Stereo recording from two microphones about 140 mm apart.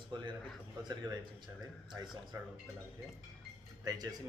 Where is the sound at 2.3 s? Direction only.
25° right (ahead or behind).